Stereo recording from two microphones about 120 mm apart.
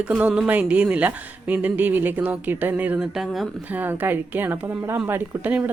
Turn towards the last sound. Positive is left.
turn(degrees=-15)  # may be behind; listen again after turning